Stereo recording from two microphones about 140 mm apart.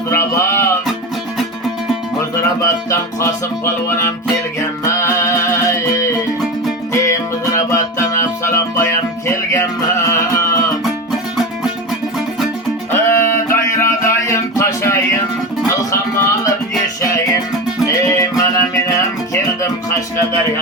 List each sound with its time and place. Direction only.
0.1 s music: 20° left (ahead or behind)
2.6 s music: 20° left (ahead or behind)
10.1 s a sound: 20° left (ahead or behind)
12.9 s music: 20° left (ahead or behind)
17.8 s music: 20° left (ahead or behind)